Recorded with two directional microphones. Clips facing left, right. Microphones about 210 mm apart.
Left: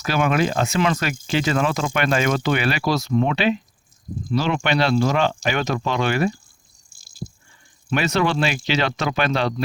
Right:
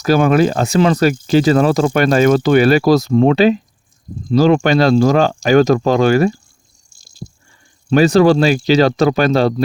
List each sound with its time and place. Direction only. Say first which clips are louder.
0.0 s speech: right 8 dB; 40° right (ahead or behind)
7.9 s speech: right 11 dB; 35° right (ahead or behind)